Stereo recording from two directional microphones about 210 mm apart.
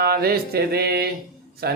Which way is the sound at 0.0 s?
45° right (ahead or behind).